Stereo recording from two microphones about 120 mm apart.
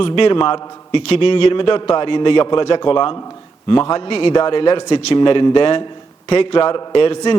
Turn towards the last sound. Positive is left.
turn(degrees=45)  # may be behind; listen again after turning